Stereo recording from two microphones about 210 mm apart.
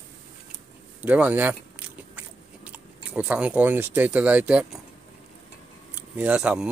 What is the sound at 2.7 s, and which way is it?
Speech, 5° right (ahead or behind).